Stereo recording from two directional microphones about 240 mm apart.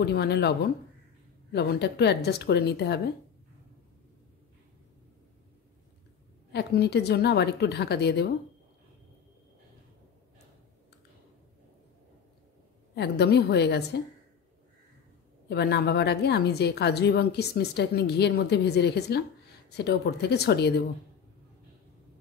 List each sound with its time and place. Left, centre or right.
0.0 s a woman's voice: left
6.5 s a woman's voice: left
12.9 s a woman's voice: left
15.5 s a woman's voice: left